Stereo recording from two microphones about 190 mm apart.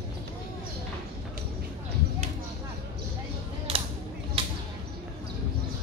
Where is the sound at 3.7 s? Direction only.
30° right (ahead or behind).